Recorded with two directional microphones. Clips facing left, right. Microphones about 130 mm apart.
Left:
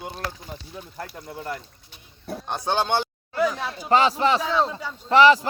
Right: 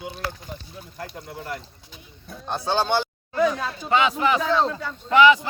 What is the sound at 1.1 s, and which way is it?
Speech, 25° right (ahead or behind).